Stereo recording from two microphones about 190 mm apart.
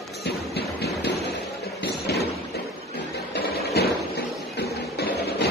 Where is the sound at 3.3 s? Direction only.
60° left (ahead or behind).